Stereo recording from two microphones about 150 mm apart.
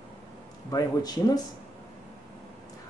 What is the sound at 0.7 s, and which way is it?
Speech, 25° left (ahead or behind).